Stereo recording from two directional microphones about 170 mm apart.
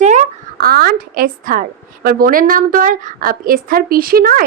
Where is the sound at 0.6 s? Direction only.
65° right (ahead or behind).